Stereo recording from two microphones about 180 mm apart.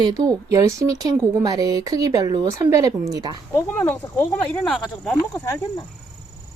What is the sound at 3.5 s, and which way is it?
Speech, 10° left (ahead or behind).